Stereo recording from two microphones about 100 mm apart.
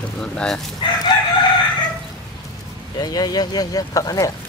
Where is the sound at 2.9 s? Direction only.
40° left (ahead or behind).